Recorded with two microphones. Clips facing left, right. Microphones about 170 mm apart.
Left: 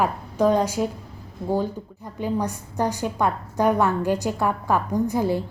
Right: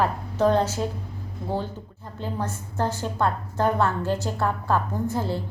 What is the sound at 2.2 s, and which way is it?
A woman's voice, 15° left (ahead or behind).